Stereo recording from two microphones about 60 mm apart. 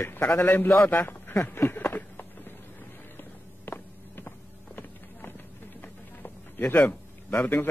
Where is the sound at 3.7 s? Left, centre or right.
Left.